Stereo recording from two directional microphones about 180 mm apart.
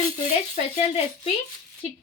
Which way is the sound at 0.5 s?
35° left (ahead or behind).